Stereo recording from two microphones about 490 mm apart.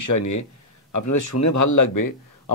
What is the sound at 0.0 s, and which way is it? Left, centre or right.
Speech, left.